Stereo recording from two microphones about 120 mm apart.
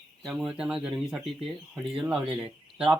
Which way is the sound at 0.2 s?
5° right (ahead or behind).